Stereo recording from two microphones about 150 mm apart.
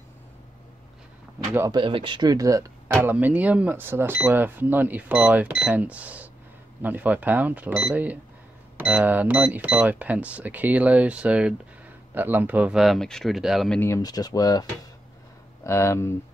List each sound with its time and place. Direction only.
1.4 s speech: 15° right (ahead or behind)
1.7 s speech: 35° right (ahead or behind)
3.0 s speech: 10° right (ahead or behind)
13.7 s speech: 20° left (ahead or behind)